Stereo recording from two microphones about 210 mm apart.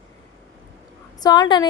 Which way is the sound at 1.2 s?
20° left (ahead or behind).